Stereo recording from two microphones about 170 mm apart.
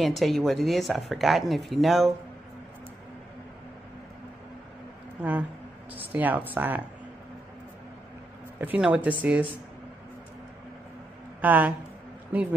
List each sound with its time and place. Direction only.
0.0 s speech: centre (ahead or behind)
5.2 s speech: 5° right (ahead or behind)
8.5 s speech: 10° right (ahead or behind)
11.4 s speech: 10° right (ahead or behind)